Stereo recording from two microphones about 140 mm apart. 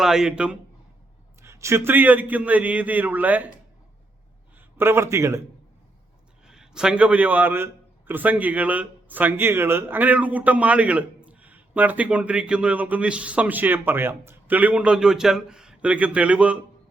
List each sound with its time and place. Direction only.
0.0 s speech: 5° right (ahead or behind)
1.4 s a man's voice: 20° right (ahead or behind)
4.5 s a man's voice: 15° right (ahead or behind)
6.4 s a man's voice: 5° right (ahead or behind)